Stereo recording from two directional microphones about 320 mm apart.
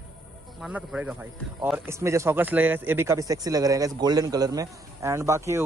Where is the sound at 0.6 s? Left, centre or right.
Centre.